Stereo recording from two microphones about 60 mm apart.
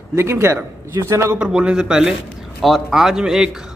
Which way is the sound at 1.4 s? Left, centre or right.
Centre.